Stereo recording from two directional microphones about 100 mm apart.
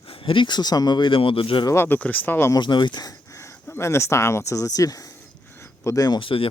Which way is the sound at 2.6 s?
50° left (ahead or behind).